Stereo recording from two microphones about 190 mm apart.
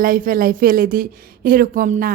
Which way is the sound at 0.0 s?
45° right (ahead or behind).